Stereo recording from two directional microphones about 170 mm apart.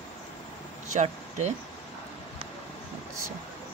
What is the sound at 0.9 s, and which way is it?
Speech, 45° right (ahead or behind).